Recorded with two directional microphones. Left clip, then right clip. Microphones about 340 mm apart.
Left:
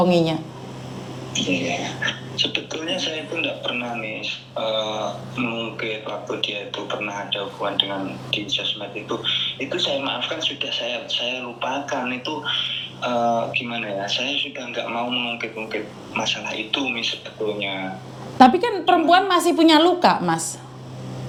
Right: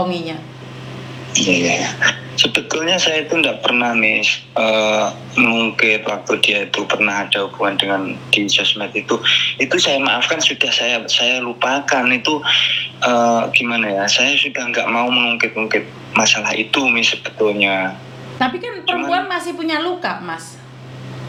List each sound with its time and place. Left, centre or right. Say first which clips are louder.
1.3 s speech: right 8 dB; right
18.3 s a woman's voice: left 6 dB; left